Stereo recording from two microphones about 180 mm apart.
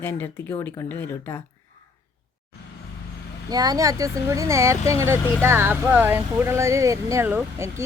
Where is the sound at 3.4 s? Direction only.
20° right (ahead or behind).